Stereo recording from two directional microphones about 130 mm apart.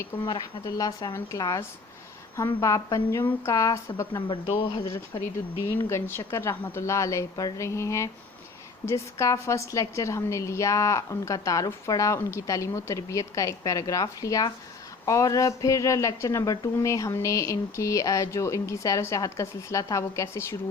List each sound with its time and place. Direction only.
0.2 s a woman's voice: 35° left (ahead or behind)
4.3 s speech: 40° left (ahead or behind)
5.1 s a woman's voice: 30° left (ahead or behind)